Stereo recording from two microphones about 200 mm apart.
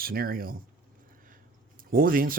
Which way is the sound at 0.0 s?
45° right (ahead or behind).